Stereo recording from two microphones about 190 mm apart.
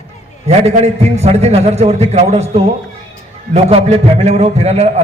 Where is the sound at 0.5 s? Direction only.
35° right (ahead or behind).